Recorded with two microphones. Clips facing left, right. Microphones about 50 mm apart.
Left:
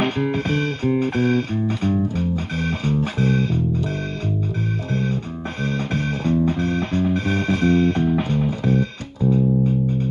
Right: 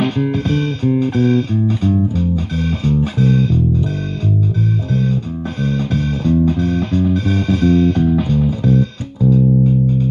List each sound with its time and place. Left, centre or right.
0.2 s music: left
5.6 s music: left